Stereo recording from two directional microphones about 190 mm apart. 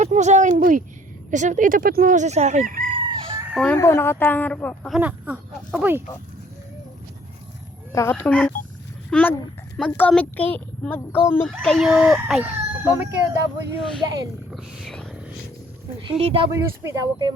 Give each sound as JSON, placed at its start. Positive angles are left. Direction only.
{"t": 0.0, "sound": "speech", "side_deg": -40}
{"t": 2.9, "sound": "chicken", "side_deg": -25}
{"t": 3.4, "sound": "chicken", "side_deg": -5}
{"t": 3.7, "sound": "a child's voice", "side_deg": 15}
{"t": 4.9, "sound": "speech", "side_deg": -10}
{"t": 8.1, "sound": "a child's voice", "side_deg": 5}
{"t": 11.6, "sound": "speech", "side_deg": 0}
{"t": 14.5, "sound": "speech", "side_deg": 0}
{"t": 16.0, "sound": "speech", "side_deg": -30}
{"t": 16.5, "sound": "speech", "side_deg": -15}